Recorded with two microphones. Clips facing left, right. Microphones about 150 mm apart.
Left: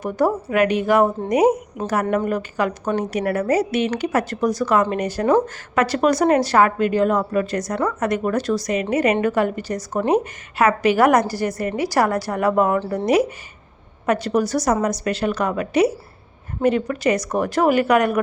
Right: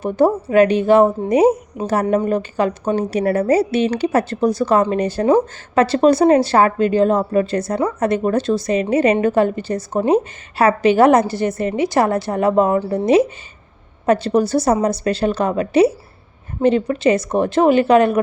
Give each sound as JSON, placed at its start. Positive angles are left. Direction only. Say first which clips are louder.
{"t": 0.0, "sound": "a woman's voice", "louder": "right 4 dB", "side_deg": -25}